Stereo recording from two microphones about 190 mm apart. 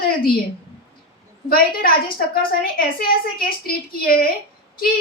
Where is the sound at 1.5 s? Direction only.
50° left (ahead or behind).